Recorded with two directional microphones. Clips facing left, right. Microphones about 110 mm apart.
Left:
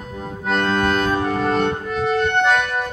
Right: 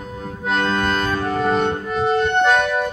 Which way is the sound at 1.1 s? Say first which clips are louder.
Left 2 dB; 15° left (ahead or behind).